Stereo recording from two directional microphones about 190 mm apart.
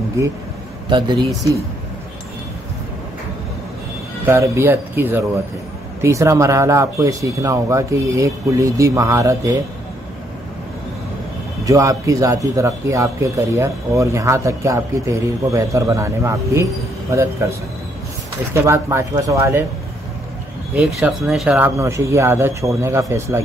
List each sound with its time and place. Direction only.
0.8 s speech: 25° right (ahead or behind)
4.3 s speech: 10° right (ahead or behind)
11.6 s speech: 15° right (ahead or behind)
20.7 s speech: 5° right (ahead or behind)